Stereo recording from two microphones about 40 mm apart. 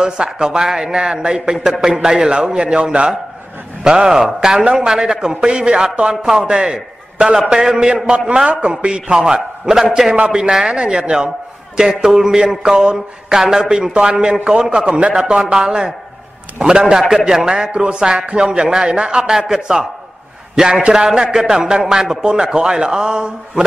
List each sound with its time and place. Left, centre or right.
0.0 s a man's voice: centre
8.5 s a man's voice: right
9.1 s a man's voice: centre
10.1 s a man's voice: right